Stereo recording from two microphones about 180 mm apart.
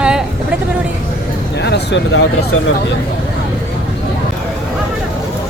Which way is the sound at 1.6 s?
70° left (ahead or behind).